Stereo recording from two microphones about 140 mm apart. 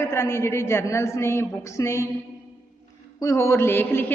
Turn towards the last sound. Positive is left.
turn(degrees=15)  # may be behind; listen again after turning